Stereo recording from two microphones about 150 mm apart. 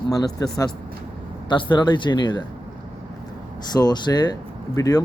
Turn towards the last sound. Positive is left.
turn(degrees=25)  # may be behind; listen again after turning